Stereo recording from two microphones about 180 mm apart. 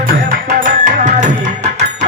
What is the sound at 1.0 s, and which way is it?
Tabla, 45° right (ahead or behind).